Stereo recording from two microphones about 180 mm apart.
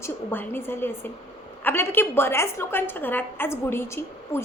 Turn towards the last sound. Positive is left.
turn(degrees=15)  # may be behind; listen again after turning